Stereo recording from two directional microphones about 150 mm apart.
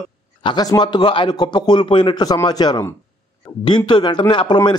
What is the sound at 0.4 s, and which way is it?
A man's voice, 30° left (ahead or behind).